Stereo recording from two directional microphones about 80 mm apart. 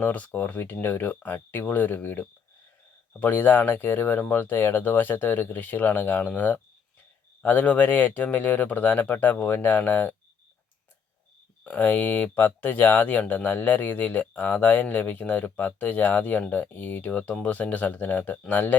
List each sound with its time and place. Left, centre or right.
0.0 s speech: left
11.6 s speech: left